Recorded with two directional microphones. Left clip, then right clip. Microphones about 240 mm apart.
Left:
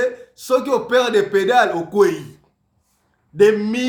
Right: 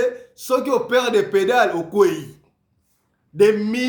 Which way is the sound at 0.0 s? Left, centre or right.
Centre.